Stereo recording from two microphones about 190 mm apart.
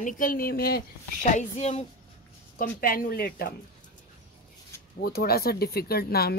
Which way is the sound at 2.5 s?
50° left (ahead or behind).